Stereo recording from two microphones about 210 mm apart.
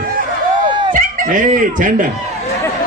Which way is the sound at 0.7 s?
20° right (ahead or behind).